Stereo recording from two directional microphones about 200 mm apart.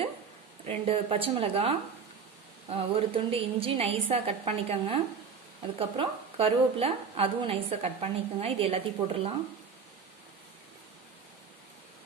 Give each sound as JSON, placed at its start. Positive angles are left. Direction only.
{"t": 0.7, "sound": "a woman's voice", "side_deg": -30}